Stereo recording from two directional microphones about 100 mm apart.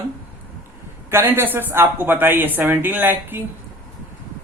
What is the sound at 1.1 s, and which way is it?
Speech, 25° right (ahead or behind).